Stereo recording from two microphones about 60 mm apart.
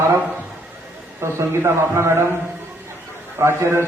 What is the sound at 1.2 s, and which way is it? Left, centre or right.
A man's voice, right.